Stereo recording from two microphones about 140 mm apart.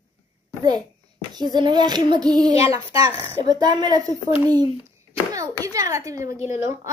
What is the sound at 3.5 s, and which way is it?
Child singing, 30° right (ahead or behind).